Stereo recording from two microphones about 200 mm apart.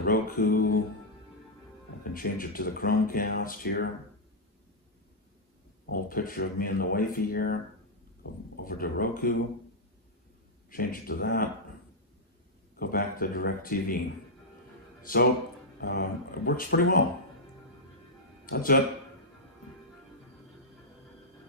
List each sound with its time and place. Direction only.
0.0 s music: 45° left (ahead or behind)
2.1 s speech: 45° left (ahead or behind)
6.0 s speech: 45° left (ahead or behind)
8.6 s speech: 45° left (ahead or behind)
10.7 s speech: 45° left (ahead or behind)
12.7 s speech: 45° left (ahead or behind)
15.0 s a man's voice: 45° left (ahead or behind)
18.4 s a man's voice: 45° left (ahead or behind)